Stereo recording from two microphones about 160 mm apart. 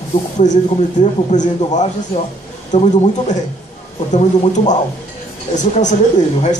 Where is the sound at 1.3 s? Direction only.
50° left (ahead or behind).